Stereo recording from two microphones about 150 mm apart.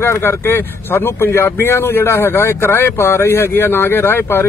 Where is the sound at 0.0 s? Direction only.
15° left (ahead or behind).